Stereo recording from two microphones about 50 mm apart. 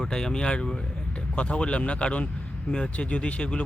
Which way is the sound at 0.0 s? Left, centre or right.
Centre.